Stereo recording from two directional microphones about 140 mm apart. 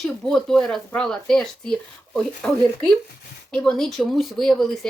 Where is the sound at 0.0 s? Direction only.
Centre (ahead or behind).